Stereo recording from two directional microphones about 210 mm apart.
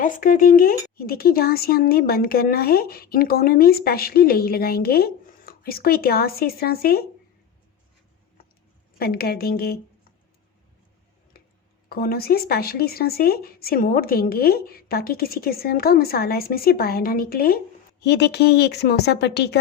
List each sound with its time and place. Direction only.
0.0 s speech: 40° left (ahead or behind)
9.0 s speech: 45° left (ahead or behind)
11.9 s speech: 45° left (ahead or behind)